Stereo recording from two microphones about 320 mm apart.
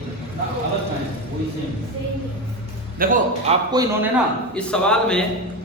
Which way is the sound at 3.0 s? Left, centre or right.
Right.